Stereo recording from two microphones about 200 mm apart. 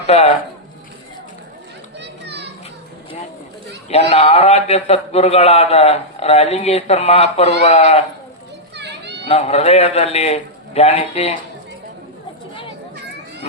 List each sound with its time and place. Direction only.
0.1 s a man's voice: 30° left (ahead or behind)
2.0 s children playing: 60° right (ahead or behind)
4.1 s a man's voice: 30° left (ahead or behind)
8.7 s children playing: 60° right (ahead or behind)
9.2 s a man's voice: 30° left (ahead or behind)